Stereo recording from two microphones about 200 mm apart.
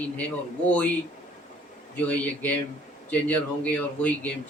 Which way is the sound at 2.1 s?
5° left (ahead or behind).